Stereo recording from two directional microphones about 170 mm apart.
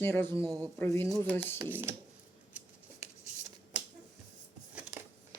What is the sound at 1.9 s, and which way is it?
Speech, 15° right (ahead or behind).